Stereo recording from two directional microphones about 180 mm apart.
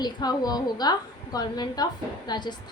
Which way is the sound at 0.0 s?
20° left (ahead or behind).